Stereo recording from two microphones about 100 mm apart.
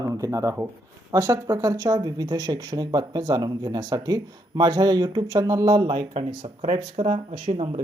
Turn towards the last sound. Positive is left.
turn(degrees=-65)  # may be behind; listen again after turning